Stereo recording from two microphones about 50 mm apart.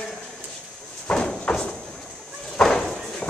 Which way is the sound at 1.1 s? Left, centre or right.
Centre.